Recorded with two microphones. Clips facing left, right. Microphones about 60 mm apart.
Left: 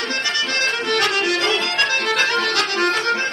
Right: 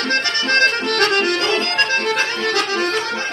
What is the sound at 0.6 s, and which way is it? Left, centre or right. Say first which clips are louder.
Accordion: right 5 dB; right.